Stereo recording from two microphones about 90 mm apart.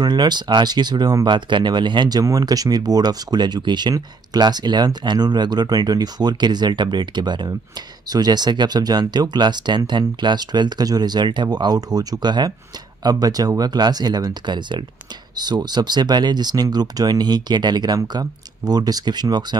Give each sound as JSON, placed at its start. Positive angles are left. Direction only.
{"t": 0.0, "sound": "speech", "side_deg": -55}